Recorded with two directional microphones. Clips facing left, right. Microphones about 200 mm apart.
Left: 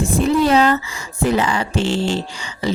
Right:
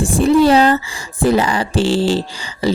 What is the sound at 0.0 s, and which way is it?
Speech, 35° right (ahead or behind).